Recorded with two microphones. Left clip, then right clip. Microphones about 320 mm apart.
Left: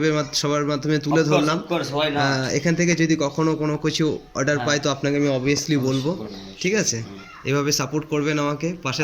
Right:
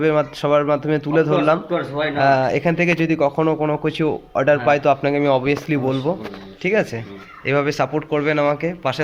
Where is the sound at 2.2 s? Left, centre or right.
Centre.